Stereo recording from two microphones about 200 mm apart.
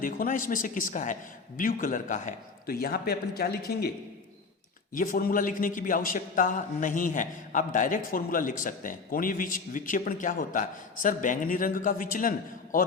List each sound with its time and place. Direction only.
0.0 s a man's voice: 45° left (ahead or behind)
4.9 s a man's voice: 45° left (ahead or behind)